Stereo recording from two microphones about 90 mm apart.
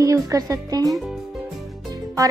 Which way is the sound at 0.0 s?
40° right (ahead or behind).